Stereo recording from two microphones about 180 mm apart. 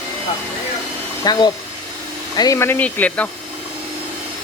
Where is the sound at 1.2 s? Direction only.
20° left (ahead or behind).